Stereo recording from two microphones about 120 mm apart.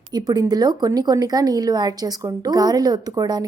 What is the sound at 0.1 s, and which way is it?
A woman's voice, 35° right (ahead or behind).